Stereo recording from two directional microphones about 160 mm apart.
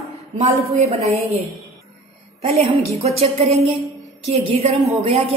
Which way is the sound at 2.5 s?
40° right (ahead or behind).